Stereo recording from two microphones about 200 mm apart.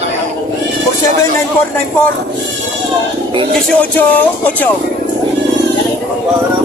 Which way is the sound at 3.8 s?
10° left (ahead or behind).